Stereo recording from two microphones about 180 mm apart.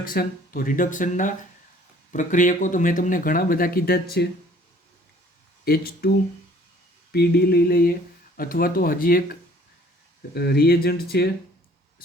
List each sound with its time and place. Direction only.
0.0 s speech: 55° left (ahead or behind)
5.6 s speech: 55° left (ahead or behind)
7.1 s speech: 60° left (ahead or behind)